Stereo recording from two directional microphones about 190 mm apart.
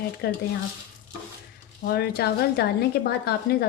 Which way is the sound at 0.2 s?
55° left (ahead or behind).